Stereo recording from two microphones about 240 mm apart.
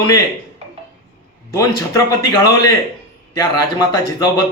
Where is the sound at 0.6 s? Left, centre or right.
Right.